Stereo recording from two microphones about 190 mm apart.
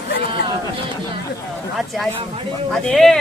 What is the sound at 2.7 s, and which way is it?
Speech, centre (ahead or behind).